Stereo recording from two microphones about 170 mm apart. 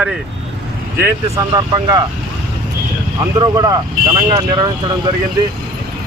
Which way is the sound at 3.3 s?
20° right (ahead or behind).